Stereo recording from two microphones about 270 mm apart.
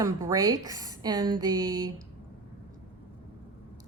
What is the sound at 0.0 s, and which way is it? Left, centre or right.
A woman's voice, centre.